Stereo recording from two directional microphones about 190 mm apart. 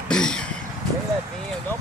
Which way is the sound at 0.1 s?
5° left (ahead or behind).